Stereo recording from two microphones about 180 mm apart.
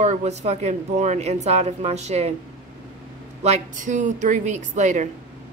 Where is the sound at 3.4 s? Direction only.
40° right (ahead or behind).